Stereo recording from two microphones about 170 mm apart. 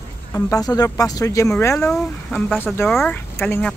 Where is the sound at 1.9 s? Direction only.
5° left (ahead or behind).